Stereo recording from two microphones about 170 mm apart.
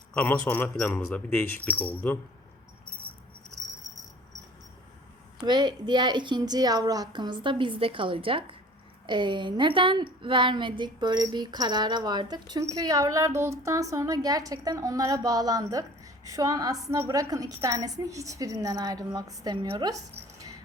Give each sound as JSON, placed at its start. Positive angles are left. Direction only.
{"t": 0.1, "sound": "speech", "side_deg": 5}
{"t": 5.4, "sound": "a woman's voice", "side_deg": -25}